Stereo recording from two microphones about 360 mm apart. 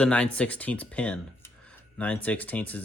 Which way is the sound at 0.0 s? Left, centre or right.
Centre.